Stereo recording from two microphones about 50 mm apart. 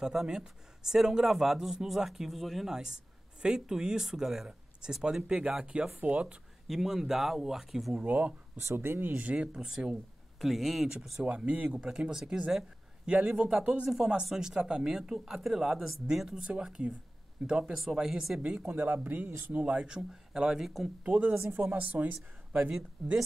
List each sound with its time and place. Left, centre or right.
0.0 s speech: centre
6.7 s speech: centre
7.9 s speech: right
8.7 s speech: right
9.1 s speech: right; by 10.9 s centre
11.1 s speech: centre
12.4 s a sound: centre
13.4 s speech: centre
18.7 s speech: right
19.5 s speech: right; by 20.9 s centre
21.0 s speech: right
23.0 s speech: centre